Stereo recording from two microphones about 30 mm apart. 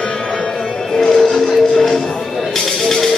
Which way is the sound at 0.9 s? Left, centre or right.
Centre.